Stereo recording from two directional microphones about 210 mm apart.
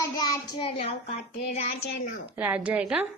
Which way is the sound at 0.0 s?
20° left (ahead or behind).